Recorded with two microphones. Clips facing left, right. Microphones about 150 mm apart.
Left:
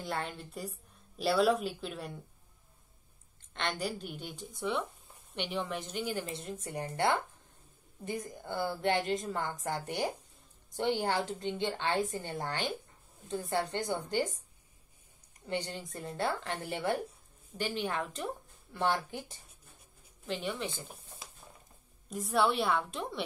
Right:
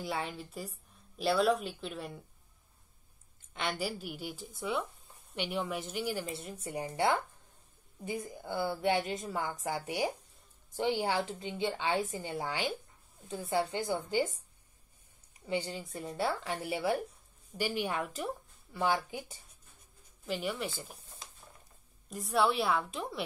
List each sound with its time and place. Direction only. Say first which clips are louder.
0.0 s speech: right 1 dB; centre (ahead or behind)
3.5 s speech: even; 5° right (ahead or behind)
15.4 s speech: right 1 dB; 5° right (ahead or behind)
22.1 s speech: even; centre (ahead or behind)